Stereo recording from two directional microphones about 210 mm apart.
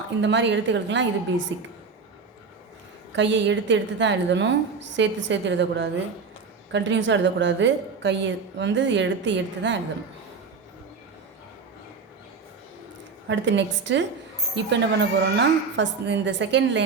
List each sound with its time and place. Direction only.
0.2 s a woman's voice: 60° right (ahead or behind)
3.1 s a woman's voice: 60° right (ahead or behind)
13.2 s a woman's voice: 60° right (ahead or behind)